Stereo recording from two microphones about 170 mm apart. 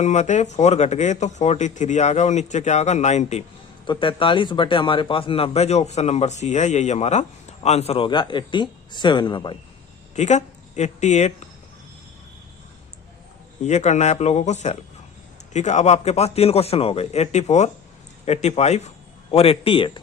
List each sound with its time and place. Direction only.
0.0 s speech: 45° left (ahead or behind)
3.8 s speech: 30° left (ahead or behind)
10.2 s speech: 45° left (ahead or behind)
13.7 s speech: 40° left (ahead or behind)